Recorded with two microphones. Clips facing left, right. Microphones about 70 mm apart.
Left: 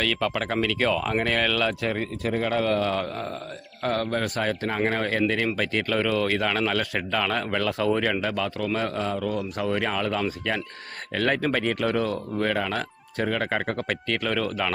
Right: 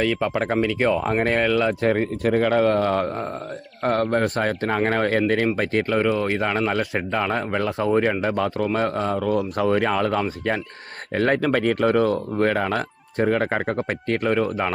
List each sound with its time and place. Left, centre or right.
0.0 s speech: right
0.9 s speech: right
1.8 s speech: right
5.5 s speech: right
11.1 s speech: right
11.3 s speech: right